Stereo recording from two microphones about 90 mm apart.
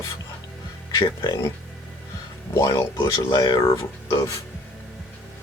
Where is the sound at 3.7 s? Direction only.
35° left (ahead or behind).